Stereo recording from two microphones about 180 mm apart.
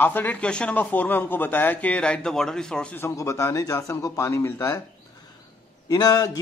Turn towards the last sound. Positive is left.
turn(degrees=20)  # may be behind; listen again after turning